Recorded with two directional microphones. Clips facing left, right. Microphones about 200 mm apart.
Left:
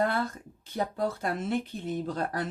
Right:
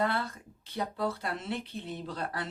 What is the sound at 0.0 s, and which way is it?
Speech, 45° left (ahead or behind).